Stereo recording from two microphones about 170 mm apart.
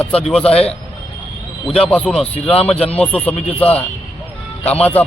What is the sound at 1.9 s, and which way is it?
Speech, 5° left (ahead or behind).